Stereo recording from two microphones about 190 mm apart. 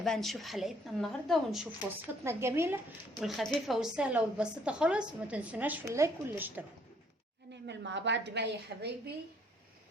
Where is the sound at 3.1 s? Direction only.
Centre (ahead or behind).